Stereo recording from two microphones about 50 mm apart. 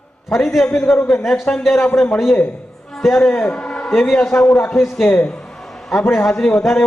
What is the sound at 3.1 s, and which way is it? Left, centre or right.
Speech, centre.